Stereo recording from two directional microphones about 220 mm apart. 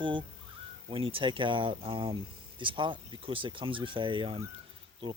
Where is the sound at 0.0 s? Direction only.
20° right (ahead or behind).